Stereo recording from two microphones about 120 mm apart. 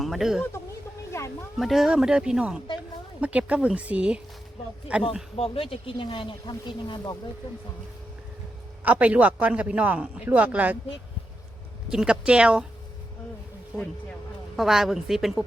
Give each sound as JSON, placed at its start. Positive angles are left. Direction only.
{"t": 0.0, "sound": "speech", "side_deg": 0}
{"t": 1.5, "sound": "a man's voice", "side_deg": 0}
{"t": 5.4, "sound": "speech", "side_deg": 55}
{"t": 8.8, "sound": "a man's voice", "side_deg": -10}
{"t": 11.9, "sound": "a man's voice", "side_deg": -5}
{"t": 14.5, "sound": "speech", "side_deg": -5}